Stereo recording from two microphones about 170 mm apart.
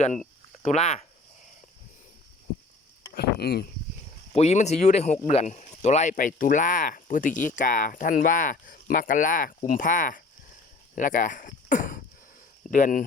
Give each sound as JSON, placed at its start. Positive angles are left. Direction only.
{"t": 0.6, "sound": "speech", "side_deg": 45}
{"t": 3.2, "sound": "speech", "side_deg": 70}
{"t": 4.3, "sound": "speech", "side_deg": 40}